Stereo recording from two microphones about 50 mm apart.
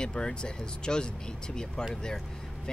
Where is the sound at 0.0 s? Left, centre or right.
Centre.